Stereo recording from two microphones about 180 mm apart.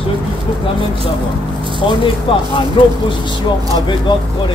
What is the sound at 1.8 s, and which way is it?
Speech, 25° left (ahead or behind).